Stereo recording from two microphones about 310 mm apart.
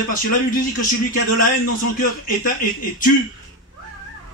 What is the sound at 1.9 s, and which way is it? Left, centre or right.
Speech, left.